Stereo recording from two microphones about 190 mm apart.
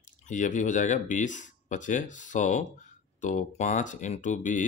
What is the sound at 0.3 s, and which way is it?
Speech, 40° left (ahead or behind).